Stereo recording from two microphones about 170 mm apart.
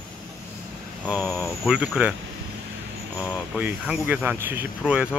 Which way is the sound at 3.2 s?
5° right (ahead or behind).